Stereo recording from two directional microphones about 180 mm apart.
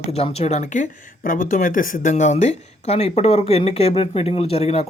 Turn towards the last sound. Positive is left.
turn(degrees=35)  # may be behind; listen again after turning